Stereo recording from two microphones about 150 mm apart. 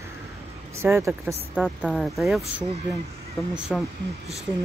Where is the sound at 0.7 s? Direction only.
15° right (ahead or behind).